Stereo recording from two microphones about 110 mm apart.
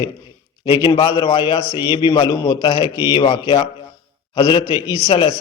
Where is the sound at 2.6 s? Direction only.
50° left (ahead or behind).